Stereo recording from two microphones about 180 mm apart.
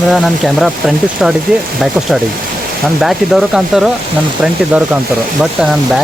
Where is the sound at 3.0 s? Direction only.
Centre (ahead or behind).